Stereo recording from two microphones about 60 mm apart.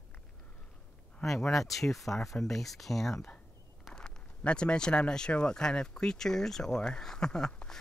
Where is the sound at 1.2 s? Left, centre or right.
Centre.